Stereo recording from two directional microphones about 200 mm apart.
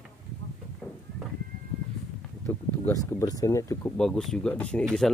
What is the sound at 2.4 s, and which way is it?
Speech, 15° left (ahead or behind).